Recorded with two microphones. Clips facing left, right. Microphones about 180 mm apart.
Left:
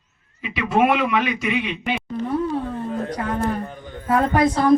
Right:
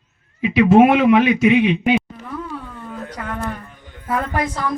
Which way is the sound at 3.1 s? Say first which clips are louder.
Left 2 dB; 35° left (ahead or behind).